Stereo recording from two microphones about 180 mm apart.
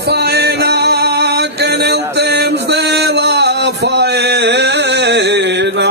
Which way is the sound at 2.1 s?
70° right (ahead or behind).